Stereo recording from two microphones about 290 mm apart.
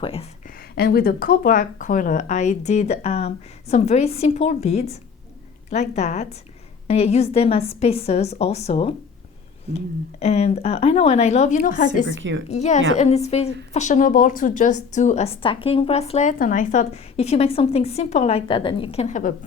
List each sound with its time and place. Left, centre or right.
0.0 s speech: centre
0.8 s a woman's voice: left
12.1 s a woman's voice: right
12.5 s a woman's voice: left